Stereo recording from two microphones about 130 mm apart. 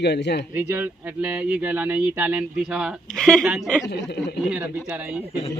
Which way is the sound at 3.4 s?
10° right (ahead or behind).